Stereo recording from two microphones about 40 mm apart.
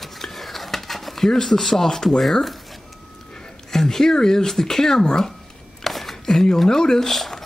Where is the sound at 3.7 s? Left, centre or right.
Centre.